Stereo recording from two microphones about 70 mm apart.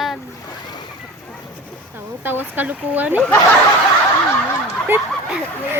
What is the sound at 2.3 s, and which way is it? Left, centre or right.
Speech, right.